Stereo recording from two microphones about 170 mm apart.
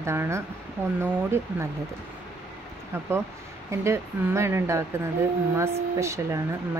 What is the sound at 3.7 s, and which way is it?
A woman's voice, 15° right (ahead or behind).